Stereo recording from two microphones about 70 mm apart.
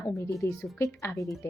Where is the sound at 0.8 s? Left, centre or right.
Left.